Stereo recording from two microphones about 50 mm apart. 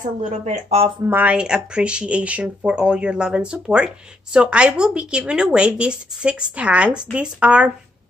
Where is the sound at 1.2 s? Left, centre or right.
Right.